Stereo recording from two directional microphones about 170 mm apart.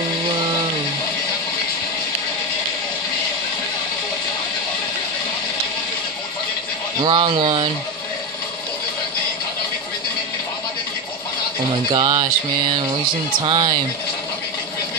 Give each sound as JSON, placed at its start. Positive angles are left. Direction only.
{"t": 7.0, "sound": "speech", "side_deg": -30}
{"t": 11.9, "sound": "speech", "side_deg": -25}
{"t": 13.4, "sound": "speech", "side_deg": -25}